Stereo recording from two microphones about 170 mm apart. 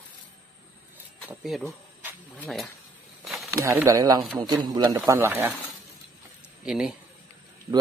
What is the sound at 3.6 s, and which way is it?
Speech, 15° right (ahead or behind).